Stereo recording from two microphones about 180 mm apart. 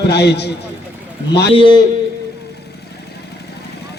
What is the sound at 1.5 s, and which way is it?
Speech, 25° left (ahead or behind).